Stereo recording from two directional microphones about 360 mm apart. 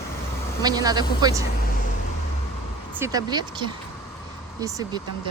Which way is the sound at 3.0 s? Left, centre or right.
Centre.